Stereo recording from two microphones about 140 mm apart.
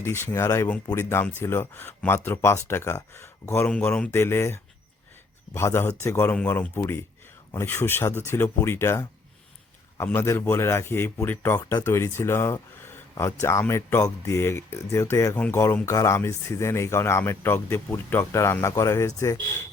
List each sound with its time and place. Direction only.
0.0 s speech: 20° left (ahead or behind)